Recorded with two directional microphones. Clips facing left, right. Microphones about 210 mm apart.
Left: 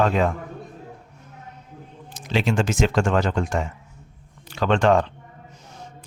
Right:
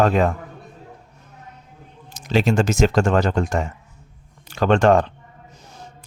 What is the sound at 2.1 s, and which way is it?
Speech, 40° right (ahead or behind).